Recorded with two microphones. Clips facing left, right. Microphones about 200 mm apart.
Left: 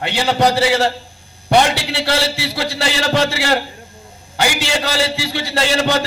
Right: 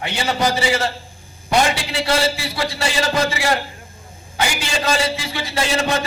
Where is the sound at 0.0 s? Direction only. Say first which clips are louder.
Left 5 dB; 70° left (ahead or behind).